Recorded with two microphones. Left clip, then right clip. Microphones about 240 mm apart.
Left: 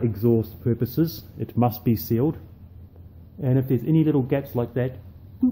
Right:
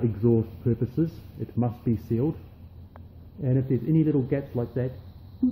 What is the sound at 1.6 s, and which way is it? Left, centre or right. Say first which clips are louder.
Speech: left 6 dB; left.